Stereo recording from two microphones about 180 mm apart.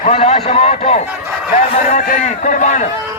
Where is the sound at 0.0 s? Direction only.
35° left (ahead or behind).